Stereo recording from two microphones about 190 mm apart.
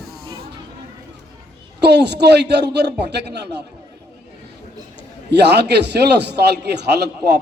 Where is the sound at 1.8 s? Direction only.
60° right (ahead or behind).